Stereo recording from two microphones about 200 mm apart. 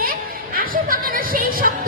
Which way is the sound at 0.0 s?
45° right (ahead or behind).